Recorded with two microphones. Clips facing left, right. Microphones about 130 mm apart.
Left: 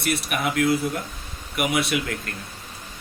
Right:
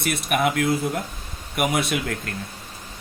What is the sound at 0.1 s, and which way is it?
Speech, 50° right (ahead or behind).